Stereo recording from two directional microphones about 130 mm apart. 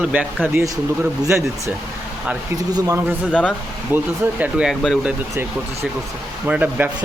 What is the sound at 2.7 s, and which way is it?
A man's voice, 25° right (ahead or behind).